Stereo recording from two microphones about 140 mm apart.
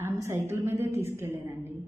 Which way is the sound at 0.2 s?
20° right (ahead or behind).